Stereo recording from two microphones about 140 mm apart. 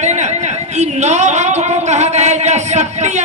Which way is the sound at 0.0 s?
55° right (ahead or behind).